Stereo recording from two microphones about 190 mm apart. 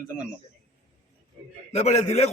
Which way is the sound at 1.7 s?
35° left (ahead or behind).